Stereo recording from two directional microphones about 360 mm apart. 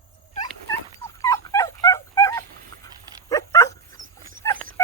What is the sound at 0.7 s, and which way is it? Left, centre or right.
Dog, centre.